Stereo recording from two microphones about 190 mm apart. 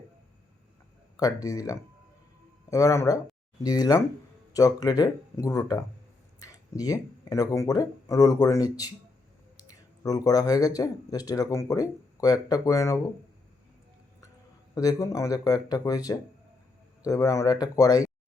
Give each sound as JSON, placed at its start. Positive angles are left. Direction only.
{"t": 1.1, "sound": "speech", "side_deg": 20}
{"t": 9.6, "sound": "a sound", "side_deg": 20}
{"t": 10.8, "sound": "speech", "side_deg": 20}
{"t": 14.8, "sound": "speech", "side_deg": 20}